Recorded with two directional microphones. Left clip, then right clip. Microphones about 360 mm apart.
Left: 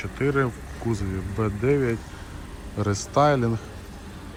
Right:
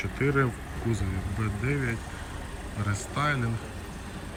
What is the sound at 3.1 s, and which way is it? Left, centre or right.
Speech, centre.